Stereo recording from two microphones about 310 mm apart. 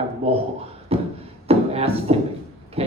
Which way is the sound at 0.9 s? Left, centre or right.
Centre.